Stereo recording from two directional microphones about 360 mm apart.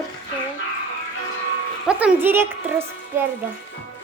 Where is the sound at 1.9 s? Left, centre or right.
Centre.